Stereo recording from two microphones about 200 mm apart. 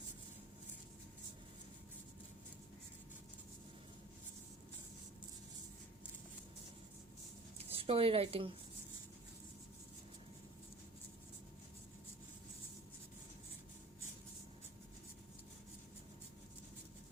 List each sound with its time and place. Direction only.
7.6 s speech: 30° right (ahead or behind)